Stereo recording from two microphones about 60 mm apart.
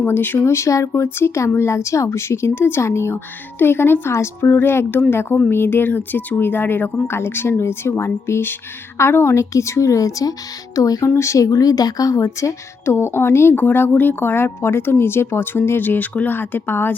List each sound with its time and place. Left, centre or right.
0.1 s speech: left
0.4 s a woman's voice: left
0.9 s a woman's voice: left
11.2 s a woman's voice: left